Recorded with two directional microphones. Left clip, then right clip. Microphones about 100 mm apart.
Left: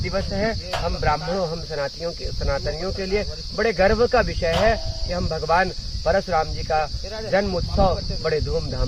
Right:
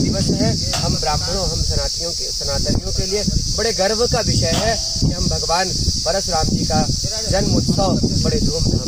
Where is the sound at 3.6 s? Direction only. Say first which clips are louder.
Even; 30° right (ahead or behind).